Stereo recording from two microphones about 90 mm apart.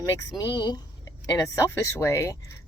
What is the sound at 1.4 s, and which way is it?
Speech, 35° left (ahead or behind).